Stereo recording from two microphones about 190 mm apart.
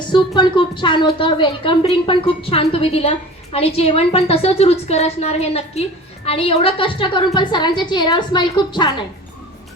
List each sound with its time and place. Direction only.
0.1 s a woman's voice: 25° left (ahead or behind)